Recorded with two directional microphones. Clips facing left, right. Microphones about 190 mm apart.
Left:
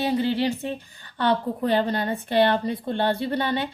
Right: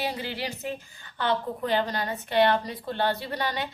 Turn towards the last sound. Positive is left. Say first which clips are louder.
# left 6 dB
turn(degrees=30)  # may be behind; listen again after turning